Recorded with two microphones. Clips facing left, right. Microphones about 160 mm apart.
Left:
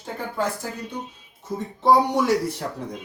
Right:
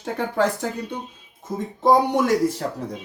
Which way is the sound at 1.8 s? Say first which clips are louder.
Right 1 dB; 50° right (ahead or behind).